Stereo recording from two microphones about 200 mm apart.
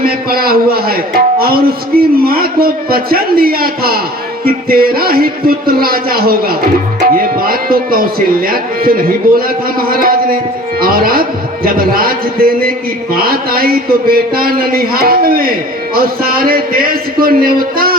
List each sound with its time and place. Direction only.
0.0 s speech: 50° right (ahead or behind)